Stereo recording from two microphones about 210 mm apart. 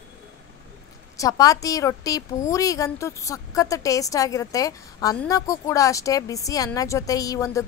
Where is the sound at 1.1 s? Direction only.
15° left (ahead or behind).